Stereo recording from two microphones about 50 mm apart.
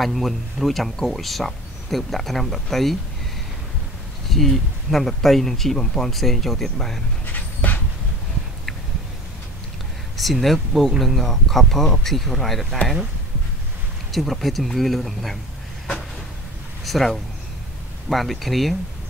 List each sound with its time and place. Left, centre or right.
0.0 s speech: centre
4.3 s speech: centre
7.3 s dog: left
10.1 s speech: centre
14.1 s speech: centre
16.8 s speech: centre